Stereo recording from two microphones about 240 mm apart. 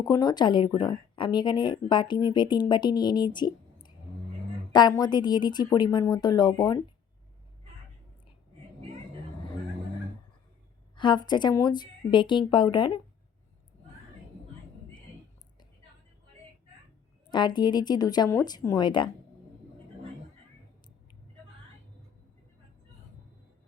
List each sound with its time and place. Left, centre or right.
0.0 s speech: centre
10.9 s speech: centre
17.3 s speech: centre